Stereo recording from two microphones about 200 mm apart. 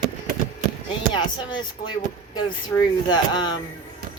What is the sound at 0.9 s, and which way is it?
Speech, 20° left (ahead or behind).